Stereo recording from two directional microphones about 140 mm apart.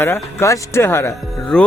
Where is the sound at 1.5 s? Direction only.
5° left (ahead or behind).